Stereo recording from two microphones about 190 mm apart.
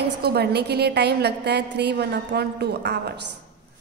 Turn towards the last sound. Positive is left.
turn(degrees=-60)  # may be behind; listen again after turning